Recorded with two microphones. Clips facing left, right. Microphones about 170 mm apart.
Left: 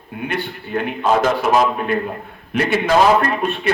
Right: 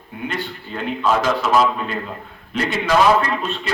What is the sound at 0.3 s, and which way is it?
A man's voice, 60° left (ahead or behind).